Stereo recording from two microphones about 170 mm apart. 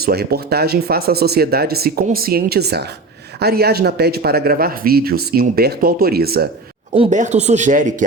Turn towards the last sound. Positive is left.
turn(degrees=-45)  # may be behind; listen again after turning